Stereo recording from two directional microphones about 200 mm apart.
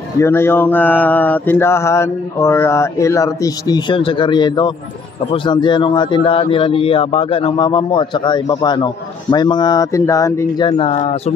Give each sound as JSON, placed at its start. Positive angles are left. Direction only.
{"t": 0.2, "sound": "mantra", "side_deg": 10}
{"t": 5.3, "sound": "a man's voice", "side_deg": 25}